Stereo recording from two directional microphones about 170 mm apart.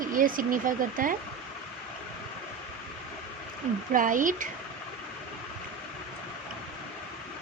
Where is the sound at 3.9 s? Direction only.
50° right (ahead or behind).